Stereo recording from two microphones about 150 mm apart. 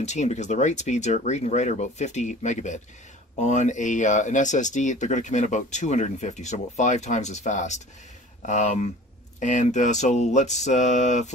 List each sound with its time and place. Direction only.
0.0 s speech: 50° left (ahead or behind)